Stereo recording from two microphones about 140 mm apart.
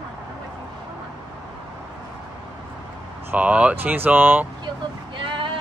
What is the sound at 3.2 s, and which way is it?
Speech, 10° right (ahead or behind).